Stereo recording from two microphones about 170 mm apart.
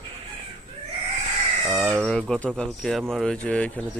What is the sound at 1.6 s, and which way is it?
Speech, centre (ahead or behind).